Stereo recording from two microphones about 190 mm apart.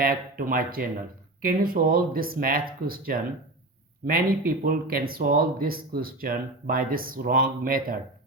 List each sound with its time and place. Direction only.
0.0 s speech: 50° right (ahead or behind)